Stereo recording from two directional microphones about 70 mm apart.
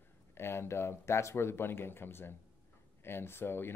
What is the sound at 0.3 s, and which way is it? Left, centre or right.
Speech, left.